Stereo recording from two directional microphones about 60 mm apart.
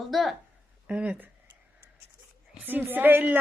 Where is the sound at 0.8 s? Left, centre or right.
Right.